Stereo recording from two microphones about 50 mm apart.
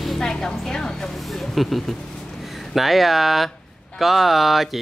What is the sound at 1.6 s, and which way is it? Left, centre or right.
Speech, centre.